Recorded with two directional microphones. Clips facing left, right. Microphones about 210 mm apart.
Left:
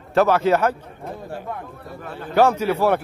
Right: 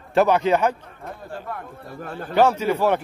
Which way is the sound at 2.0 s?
45° right (ahead or behind).